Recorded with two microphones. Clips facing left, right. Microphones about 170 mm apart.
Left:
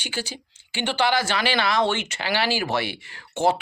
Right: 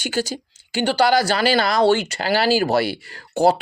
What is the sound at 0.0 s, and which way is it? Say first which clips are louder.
Speech: right 8 dB; 45° right (ahead or behind).